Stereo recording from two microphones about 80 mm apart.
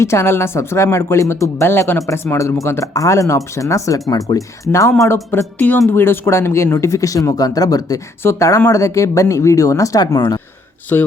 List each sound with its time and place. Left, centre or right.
0.0 s speech: left
5.3 s a woman's voice: left
8.2 s speech: left
10.2 s speech: left
10.9 s a woman's voice: left